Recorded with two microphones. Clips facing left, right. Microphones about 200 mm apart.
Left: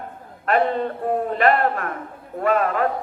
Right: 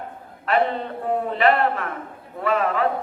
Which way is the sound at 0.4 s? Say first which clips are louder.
Left 2 dB; 45° left (ahead or behind).